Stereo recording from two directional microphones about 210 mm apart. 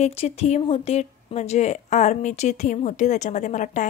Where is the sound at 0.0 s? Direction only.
30° left (ahead or behind).